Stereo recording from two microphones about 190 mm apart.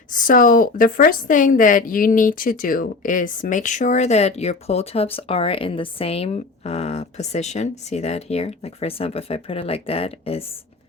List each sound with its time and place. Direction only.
0.1 s a woman's voice: 45° left (ahead or behind)